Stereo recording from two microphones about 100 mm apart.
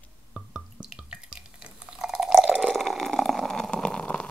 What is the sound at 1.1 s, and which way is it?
Drip, 10° right (ahead or behind).